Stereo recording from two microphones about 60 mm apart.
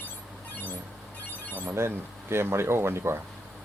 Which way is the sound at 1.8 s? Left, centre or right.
Right.